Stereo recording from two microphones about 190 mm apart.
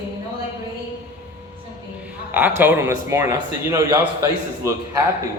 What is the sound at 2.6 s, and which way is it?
A man's voice, 10° right (ahead or behind).